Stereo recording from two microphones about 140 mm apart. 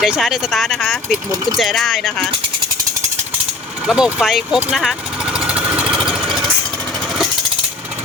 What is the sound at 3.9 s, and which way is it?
Speech, 5° right (ahead or behind).